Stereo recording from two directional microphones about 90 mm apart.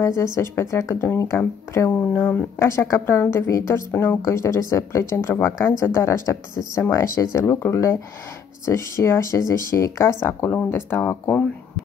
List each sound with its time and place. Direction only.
0.0 s a woman's voice: 30° left (ahead or behind)
2.6 s a woman's voice: 35° left (ahead or behind)